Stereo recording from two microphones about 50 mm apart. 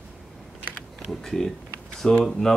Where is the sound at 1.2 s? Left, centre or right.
Centre.